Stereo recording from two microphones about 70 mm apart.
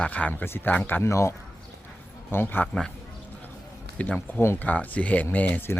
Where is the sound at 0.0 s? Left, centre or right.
Left.